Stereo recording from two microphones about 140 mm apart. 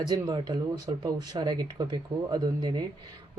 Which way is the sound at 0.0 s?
25° right (ahead or behind).